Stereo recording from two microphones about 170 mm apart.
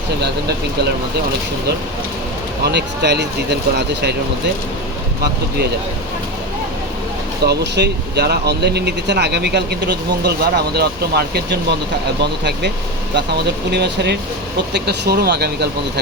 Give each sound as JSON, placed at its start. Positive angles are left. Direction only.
{"t": 2.6, "sound": "speech", "side_deg": -80}
{"t": 7.4, "sound": "speech", "side_deg": -80}